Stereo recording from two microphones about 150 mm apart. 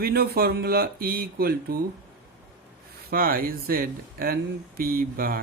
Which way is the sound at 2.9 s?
80° right.